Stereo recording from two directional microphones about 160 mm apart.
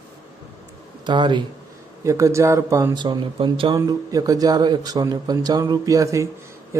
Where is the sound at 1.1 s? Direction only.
30° right (ahead or behind).